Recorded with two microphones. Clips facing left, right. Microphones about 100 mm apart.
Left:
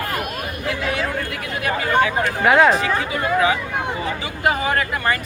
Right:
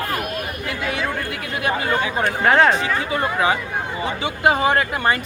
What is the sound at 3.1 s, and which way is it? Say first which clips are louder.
Speech: left 1 dB; 30° right (ahead or behind).